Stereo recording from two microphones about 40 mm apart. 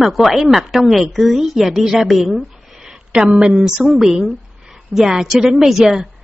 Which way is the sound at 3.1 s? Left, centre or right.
Right.